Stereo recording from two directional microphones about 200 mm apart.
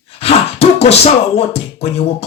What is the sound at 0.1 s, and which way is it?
Speech, 30° left (ahead or behind).